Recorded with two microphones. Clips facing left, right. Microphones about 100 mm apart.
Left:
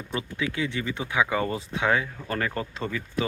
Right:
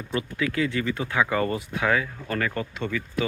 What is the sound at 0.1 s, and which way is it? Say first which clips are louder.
Speech: right 3 dB; 20° left (ahead or behind).